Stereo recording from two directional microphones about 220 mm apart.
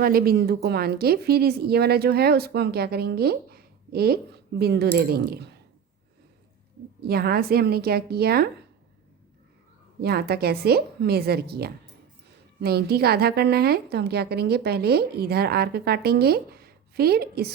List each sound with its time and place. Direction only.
0.0 s a woman's voice: 45° right (ahead or behind)
7.1 s a woman's voice: 45° right (ahead or behind)
10.0 s a woman's voice: 45° right (ahead or behind)